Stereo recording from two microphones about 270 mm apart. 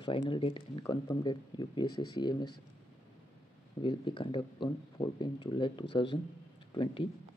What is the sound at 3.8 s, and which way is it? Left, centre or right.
Speech, centre.